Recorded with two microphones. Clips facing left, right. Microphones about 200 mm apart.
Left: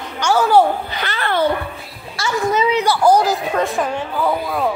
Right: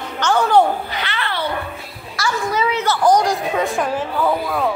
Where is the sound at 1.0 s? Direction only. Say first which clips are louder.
Left 5 dB; 45° left (ahead or behind).